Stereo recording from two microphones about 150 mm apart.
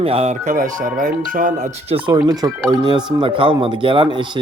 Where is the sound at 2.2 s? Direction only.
25° right (ahead or behind).